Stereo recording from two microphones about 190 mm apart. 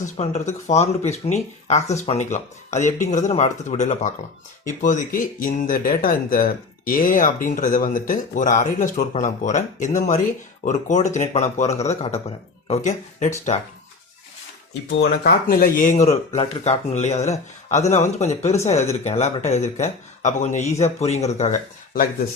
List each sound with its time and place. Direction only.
0.0 s speech: 35° left (ahead or behind)
15.2 s speech: 50° left (ahead or behind)